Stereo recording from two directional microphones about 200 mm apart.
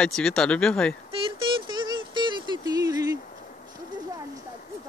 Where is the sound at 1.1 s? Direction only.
25° right (ahead or behind).